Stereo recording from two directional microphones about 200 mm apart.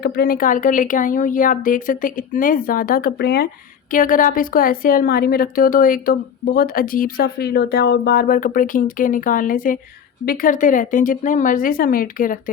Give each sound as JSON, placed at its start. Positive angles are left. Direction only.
{"t": 0.0, "sound": "a woman's voice", "side_deg": 50}